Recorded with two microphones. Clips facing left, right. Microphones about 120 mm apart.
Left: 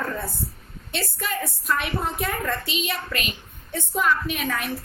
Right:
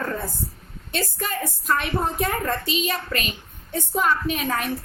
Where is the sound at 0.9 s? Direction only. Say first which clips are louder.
Right 2 dB; 40° right (ahead or behind).